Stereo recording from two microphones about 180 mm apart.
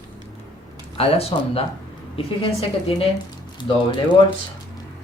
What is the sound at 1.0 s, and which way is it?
Speech, 35° left (ahead or behind).